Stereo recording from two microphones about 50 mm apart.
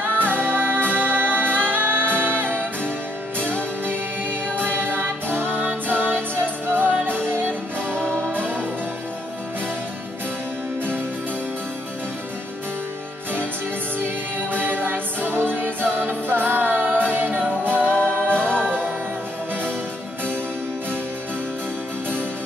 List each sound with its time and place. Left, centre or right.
0.0 s music: right
3.8 s music: right
13.9 s music: right